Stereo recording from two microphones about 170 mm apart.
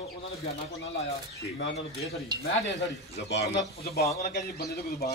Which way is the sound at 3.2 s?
90° left.